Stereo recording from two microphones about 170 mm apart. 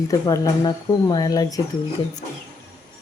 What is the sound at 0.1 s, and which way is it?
Speech, 20° left (ahead or behind).